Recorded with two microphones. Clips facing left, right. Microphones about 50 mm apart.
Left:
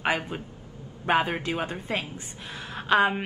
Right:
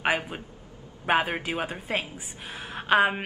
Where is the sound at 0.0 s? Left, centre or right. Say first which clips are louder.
Even; centre.